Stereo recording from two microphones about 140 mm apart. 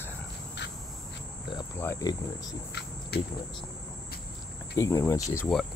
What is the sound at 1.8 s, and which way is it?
Cricket, 20° left (ahead or behind).